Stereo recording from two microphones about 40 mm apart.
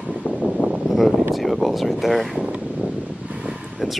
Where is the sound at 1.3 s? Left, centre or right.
Centre.